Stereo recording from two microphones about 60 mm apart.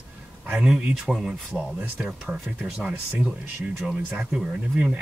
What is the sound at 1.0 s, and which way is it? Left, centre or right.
Speech, centre.